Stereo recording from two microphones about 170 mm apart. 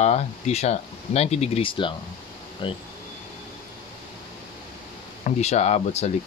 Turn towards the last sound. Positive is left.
turn(degrees=40)  # may be behind; listen again after turning